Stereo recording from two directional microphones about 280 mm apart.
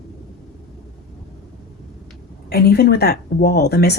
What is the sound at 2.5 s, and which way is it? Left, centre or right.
Speech, left.